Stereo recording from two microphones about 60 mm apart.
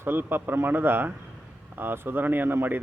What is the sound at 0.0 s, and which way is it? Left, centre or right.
Speech, right.